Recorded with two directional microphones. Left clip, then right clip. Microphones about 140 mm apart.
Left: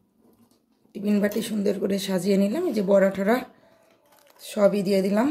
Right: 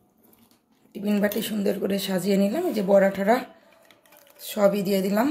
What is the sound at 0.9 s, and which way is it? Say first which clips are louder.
A woman's voice: even; 25° left (ahead or behind).